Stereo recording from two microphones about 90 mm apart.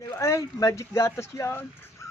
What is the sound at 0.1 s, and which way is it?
Speech, 30° left (ahead or behind).